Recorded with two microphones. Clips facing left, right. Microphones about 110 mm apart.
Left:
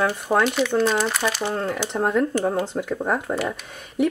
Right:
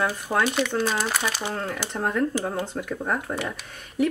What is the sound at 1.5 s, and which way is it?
Speech, 20° left (ahead or behind).